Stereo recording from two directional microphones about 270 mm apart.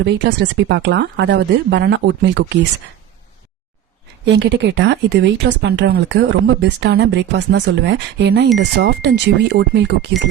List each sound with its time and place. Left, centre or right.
0.0 s speech: right
4.4 s speech: right